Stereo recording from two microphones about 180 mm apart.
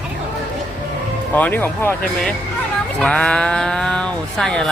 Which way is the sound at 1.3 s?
10° left (ahead or behind).